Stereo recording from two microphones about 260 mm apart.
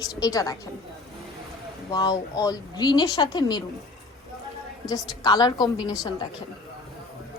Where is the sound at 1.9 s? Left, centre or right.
Centre.